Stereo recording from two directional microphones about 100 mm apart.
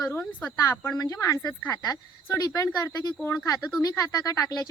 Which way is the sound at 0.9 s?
40° left (ahead or behind).